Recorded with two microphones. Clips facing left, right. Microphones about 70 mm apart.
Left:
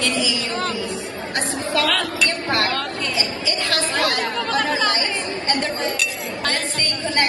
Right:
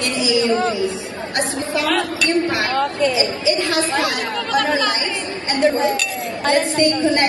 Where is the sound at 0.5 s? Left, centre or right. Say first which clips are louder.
Right 7 dB; centre.